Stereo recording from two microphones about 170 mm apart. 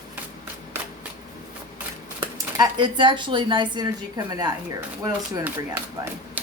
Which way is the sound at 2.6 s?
25° right (ahead or behind).